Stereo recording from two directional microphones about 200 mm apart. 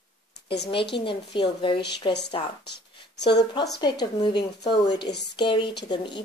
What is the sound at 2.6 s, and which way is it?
Speech, 55° left (ahead or behind).